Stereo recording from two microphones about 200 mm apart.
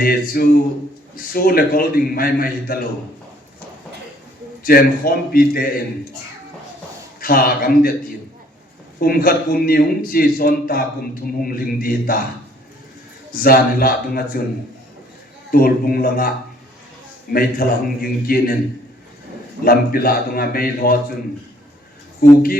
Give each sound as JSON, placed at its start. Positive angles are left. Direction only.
{"t": 0.0, "sound": "a man's voice", "side_deg": 50}
{"t": 4.6, "sound": "a man's voice", "side_deg": 45}
{"t": 7.2, "sound": "a man's voice", "side_deg": 45}
{"t": 9.0, "sound": "a man's voice", "side_deg": 45}
{"t": 13.4, "sound": "a man's voice", "side_deg": 45}
{"t": 15.5, "sound": "a man's voice", "side_deg": 50}
{"t": 17.3, "sound": "a man's voice", "side_deg": 45}
{"t": 19.6, "sound": "a man's voice", "side_deg": 45}
{"t": 22.2, "sound": "a man's voice", "side_deg": 45}